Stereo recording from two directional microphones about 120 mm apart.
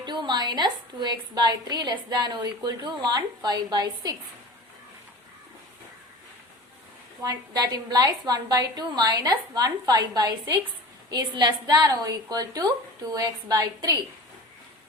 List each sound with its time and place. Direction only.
0.0 s a woman's voice: 40° right (ahead or behind)
7.2 s a woman's voice: 30° right (ahead or behind)